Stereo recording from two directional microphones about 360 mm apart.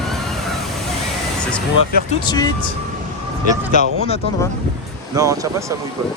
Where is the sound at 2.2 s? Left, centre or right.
Centre.